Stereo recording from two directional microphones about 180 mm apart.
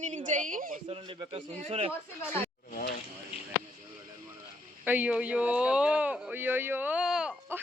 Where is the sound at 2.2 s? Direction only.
10° left (ahead or behind).